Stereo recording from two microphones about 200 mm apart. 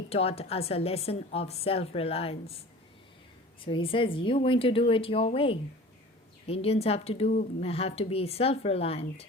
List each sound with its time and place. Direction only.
0.1 s a woman's voice: 30° left (ahead or behind)
3.6 s a woman's voice: 25° left (ahead or behind)